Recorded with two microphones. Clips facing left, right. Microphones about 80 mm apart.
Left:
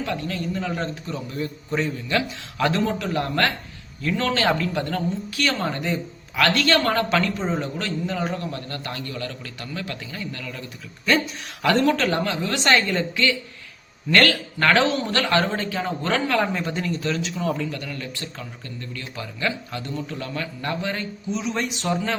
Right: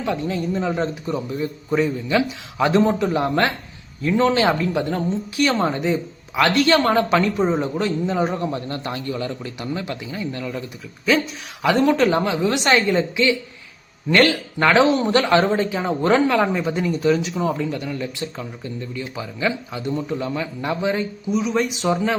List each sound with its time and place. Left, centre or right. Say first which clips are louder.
0.0 s a woman's voice: right 4 dB; centre
11.1 s speech: right 2 dB; centre
11.6 s speech: right 3 dB; centre